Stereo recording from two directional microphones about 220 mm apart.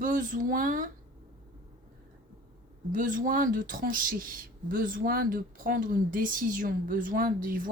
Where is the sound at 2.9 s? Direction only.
35° right (ahead or behind).